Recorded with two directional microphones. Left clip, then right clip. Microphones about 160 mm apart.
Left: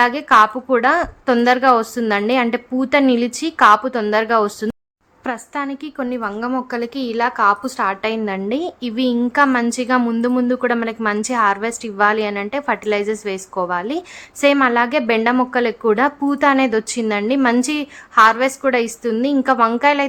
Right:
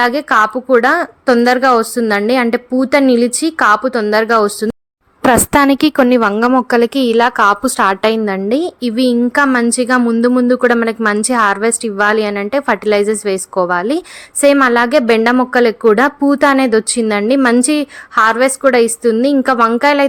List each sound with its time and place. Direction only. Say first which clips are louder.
0.0 s a woman's voice: right 1 dB; 25° right (ahead or behind)
5.2 s a woman's voice: right 14 dB; 90° right; by 6.3 s 70° right (ahead or behind)
6.3 s a woman's voice: right 11 dB; 50° right (ahead or behind)
8.2 s a woman's voice: right 6 dB; 35° right (ahead or behind)